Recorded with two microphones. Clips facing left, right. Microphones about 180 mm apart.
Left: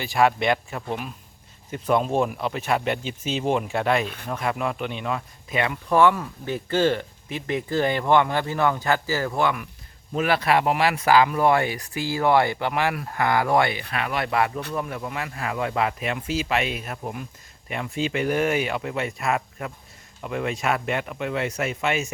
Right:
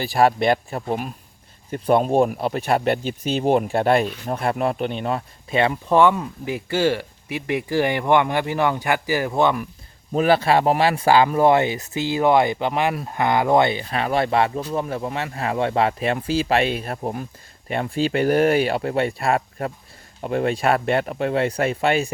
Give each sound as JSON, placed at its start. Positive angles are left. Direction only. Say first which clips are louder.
{"t": 0.0, "sound": "speech", "louder": "right 3 dB", "side_deg": -35}
{"t": 10.1, "sound": "speech", "louder": "right 4 dB", "side_deg": -35}